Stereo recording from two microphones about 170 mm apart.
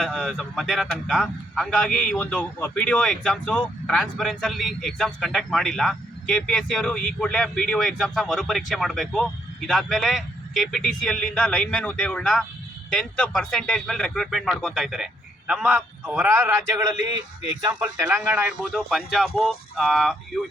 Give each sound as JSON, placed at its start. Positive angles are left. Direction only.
{"t": 0.0, "sound": "speech", "side_deg": 0}
{"t": 17.9, "sound": "speech", "side_deg": -20}
{"t": 18.6, "sound": "speech", "side_deg": 0}